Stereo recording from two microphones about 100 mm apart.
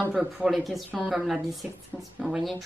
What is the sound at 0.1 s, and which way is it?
Speech, centre (ahead or behind).